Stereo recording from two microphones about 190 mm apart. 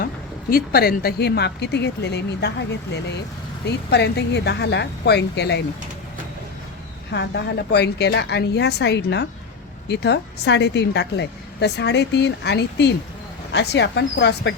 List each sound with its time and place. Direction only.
0.5 s a woman's voice: 55° left (ahead or behind)
7.1 s a woman's voice: 60° left (ahead or behind)